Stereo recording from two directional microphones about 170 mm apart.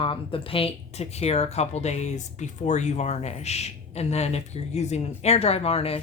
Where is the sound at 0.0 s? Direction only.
30° left (ahead or behind).